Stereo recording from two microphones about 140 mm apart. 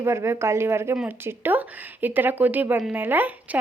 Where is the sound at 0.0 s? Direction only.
20° right (ahead or behind).